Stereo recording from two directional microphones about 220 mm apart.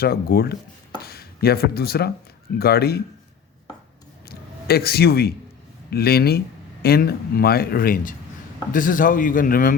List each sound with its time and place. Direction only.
0.0 s speech: 45° left (ahead or behind)
4.3 s a sound: 45° left (ahead or behind)
5.9 s a man's voice: 45° left (ahead or behind)